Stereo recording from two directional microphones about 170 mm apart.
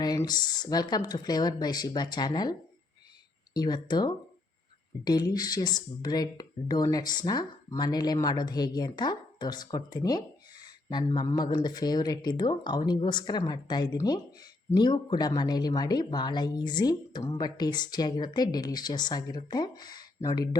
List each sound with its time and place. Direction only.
0.0 s speech: 25° left (ahead or behind)